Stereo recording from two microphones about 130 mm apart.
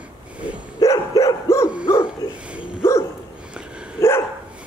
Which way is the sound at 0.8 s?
25° left (ahead or behind).